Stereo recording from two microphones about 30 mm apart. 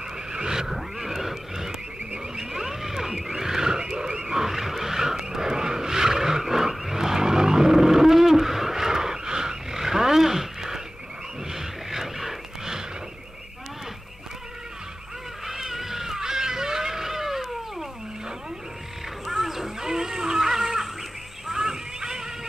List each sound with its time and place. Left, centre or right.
0.3 s wild animals: right
0.7 s grunt: centre
2.3 s a sound: centre
3.3 s vehicle: centre
4.4 s vehicle: centre
11.5 s a sound: centre
15.4 s cat: centre
19.2 s livestock: centre
21.5 s a sound: centre